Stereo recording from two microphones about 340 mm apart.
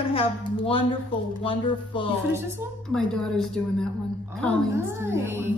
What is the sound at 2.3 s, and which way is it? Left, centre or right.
A woman's voice, centre.